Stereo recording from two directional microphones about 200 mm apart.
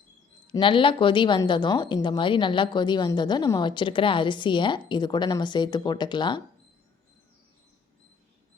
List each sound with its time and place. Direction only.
0.4 s a woman's voice: 25° left (ahead or behind)